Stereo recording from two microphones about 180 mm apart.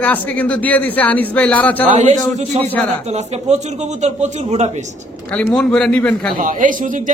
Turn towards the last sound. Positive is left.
turn(degrees=-45)  # may be behind; listen again after turning